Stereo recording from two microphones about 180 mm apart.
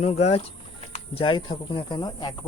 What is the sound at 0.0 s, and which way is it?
Speech, 35° left (ahead or behind).